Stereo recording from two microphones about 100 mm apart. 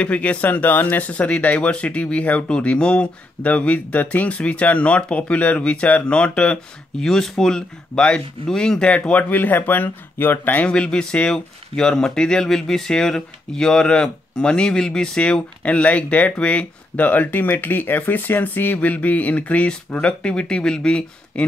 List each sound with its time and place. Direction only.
0.0 s speech: 15° left (ahead or behind)